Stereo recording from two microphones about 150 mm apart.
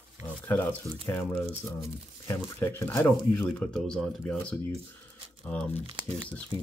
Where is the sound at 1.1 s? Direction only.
10° left (ahead or behind).